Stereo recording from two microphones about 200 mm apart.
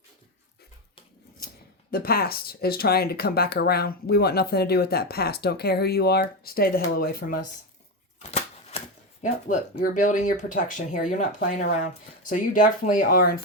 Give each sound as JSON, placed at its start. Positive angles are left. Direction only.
{"t": 1.9, "sound": "speech", "side_deg": 50}
{"t": 8.2, "sound": "a sound", "side_deg": 30}
{"t": 9.2, "sound": "speech", "side_deg": 40}